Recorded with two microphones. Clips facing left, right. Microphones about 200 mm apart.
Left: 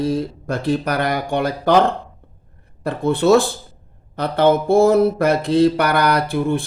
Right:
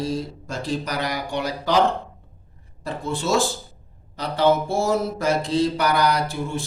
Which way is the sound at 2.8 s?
60° left (ahead or behind).